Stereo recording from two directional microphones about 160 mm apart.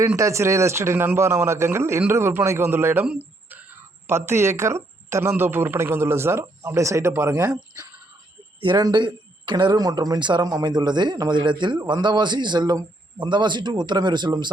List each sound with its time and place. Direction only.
0.0 s speech: 20° right (ahead or behind)
8.6 s speech: 30° right (ahead or behind)